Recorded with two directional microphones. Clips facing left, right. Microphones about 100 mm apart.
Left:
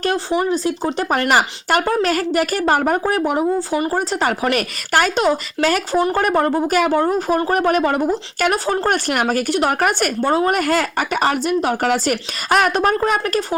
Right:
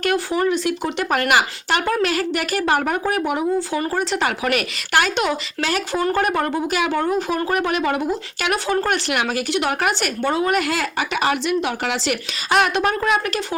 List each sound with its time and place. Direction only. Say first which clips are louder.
0.0 s a woman's voice: left 1 dB; 30° left (ahead or behind)